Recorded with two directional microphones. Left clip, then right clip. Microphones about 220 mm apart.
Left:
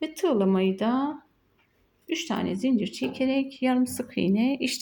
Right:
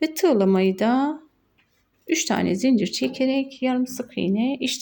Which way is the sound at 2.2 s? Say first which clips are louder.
Right 6 dB; 25° right (ahead or behind).